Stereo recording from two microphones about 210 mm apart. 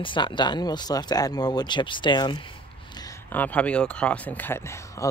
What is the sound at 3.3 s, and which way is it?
Speech, 5° left (ahead or behind).